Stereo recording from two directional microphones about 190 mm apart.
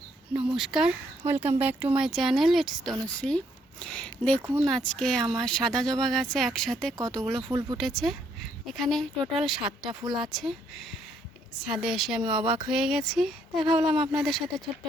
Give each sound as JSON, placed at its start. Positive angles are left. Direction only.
{"t": 0.3, "sound": "speech", "side_deg": -5}
{"t": 7.4, "sound": "speech", "side_deg": -20}
{"t": 7.8, "sound": "speech", "side_deg": 0}
{"t": 9.9, "sound": "speech", "side_deg": -20}
{"t": 10.2, "sound": "speech", "side_deg": 0}
{"t": 12.2, "sound": "speech", "side_deg": -25}
{"t": 12.6, "sound": "speech", "side_deg": 0}